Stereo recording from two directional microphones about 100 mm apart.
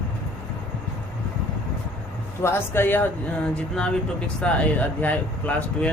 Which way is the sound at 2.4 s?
25° left (ahead or behind).